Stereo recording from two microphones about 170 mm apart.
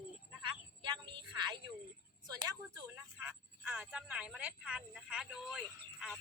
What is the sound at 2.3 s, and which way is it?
Speech, 20° right (ahead or behind).